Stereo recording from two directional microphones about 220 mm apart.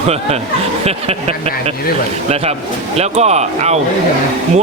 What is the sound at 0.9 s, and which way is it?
Speech, 30° right (ahead or behind).